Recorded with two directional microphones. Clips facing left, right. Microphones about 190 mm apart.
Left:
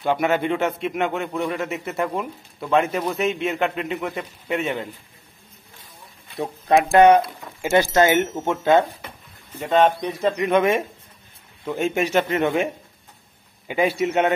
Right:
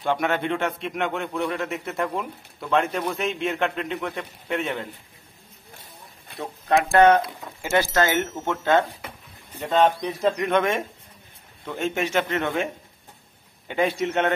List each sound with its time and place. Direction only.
0.0 s a man's voice: 5° left (ahead or behind)
6.4 s speech: 15° left (ahead or behind)
9.8 s a man's voice: centre (ahead or behind)
13.7 s speech: 10° left (ahead or behind)